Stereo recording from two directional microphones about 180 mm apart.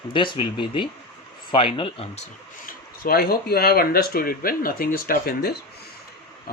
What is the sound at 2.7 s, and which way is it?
Speech, 55° left (ahead or behind).